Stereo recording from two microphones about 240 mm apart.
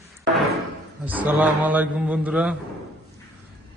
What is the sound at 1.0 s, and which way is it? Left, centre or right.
A man's voice, centre.